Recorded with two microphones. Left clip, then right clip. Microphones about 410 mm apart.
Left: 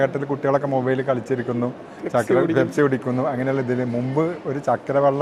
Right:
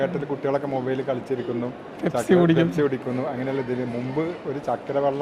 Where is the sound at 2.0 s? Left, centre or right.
Right.